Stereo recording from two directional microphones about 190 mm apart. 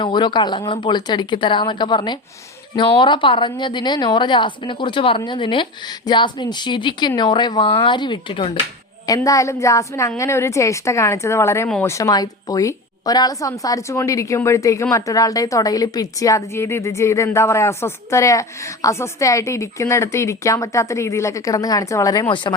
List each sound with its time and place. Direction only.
0.0 s a woman's voice: 25° left (ahead or behind)